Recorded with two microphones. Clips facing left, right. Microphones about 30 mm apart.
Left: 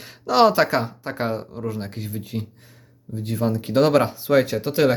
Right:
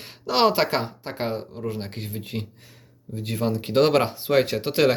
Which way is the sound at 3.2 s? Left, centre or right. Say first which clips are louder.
Left 2 dB; right.